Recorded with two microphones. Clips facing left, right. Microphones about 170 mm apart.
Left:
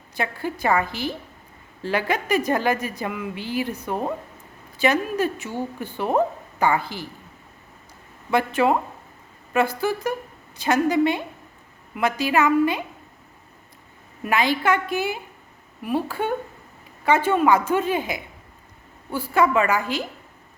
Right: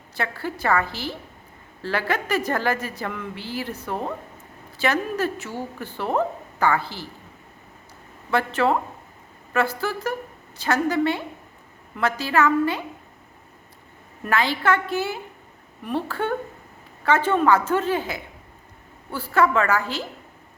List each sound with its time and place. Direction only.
0.2 s a woman's voice: 15° left (ahead or behind)
8.3 s a woman's voice: 15° left (ahead or behind)
14.3 s a woman's voice: 15° left (ahead or behind)